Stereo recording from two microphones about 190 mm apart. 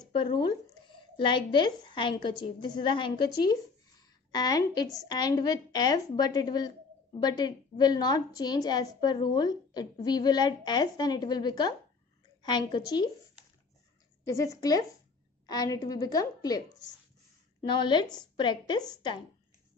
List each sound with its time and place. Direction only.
0.0 s speech: 25° left (ahead or behind)
4.3 s a woman's voice: 20° left (ahead or behind)
14.2 s a woman's voice: 15° left (ahead or behind)